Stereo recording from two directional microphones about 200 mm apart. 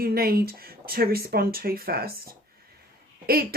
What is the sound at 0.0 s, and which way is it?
Speech, 50° right (ahead or behind).